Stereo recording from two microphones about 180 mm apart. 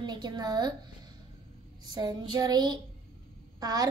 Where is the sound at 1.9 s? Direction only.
20° right (ahead or behind).